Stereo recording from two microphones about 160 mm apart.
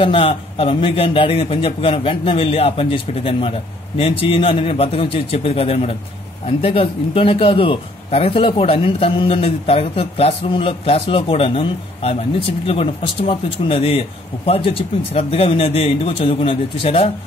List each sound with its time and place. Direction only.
0.0 s a man's voice: 35° left (ahead or behind)